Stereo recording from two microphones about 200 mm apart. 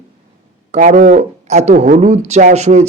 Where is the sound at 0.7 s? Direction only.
40° right (ahead or behind).